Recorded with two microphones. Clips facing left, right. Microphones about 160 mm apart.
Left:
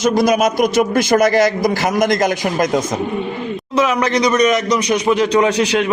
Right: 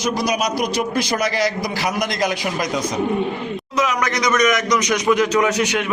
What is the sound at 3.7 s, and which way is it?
Speech, 30° left (ahead or behind).